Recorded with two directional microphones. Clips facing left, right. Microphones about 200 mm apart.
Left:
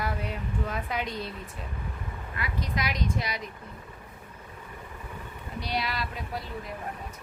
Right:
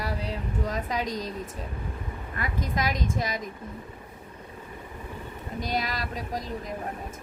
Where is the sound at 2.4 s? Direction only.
45° right (ahead or behind).